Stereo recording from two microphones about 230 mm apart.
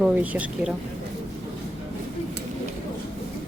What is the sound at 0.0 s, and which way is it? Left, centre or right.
Speech, centre.